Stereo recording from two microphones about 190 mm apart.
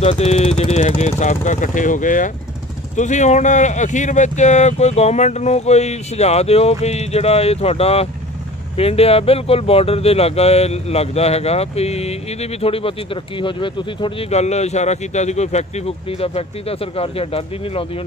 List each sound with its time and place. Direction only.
0.0 s speech: 35° left (ahead or behind)